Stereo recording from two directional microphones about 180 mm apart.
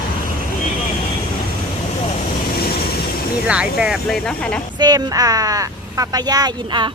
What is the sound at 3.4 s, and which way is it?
Speech, 5° right (ahead or behind).